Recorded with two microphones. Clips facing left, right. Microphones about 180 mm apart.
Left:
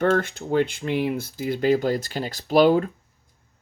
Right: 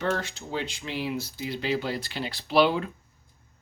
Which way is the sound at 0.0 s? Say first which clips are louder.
Left 8 dB; 55° left (ahead or behind).